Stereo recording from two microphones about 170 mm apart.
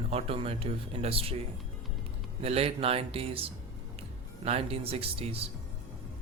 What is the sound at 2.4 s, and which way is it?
Speech, 35° right (ahead or behind).